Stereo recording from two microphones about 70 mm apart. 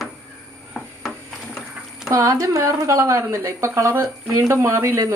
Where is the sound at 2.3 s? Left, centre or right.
Right.